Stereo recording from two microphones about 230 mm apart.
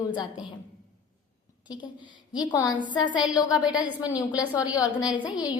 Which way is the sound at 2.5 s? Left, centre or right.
Centre.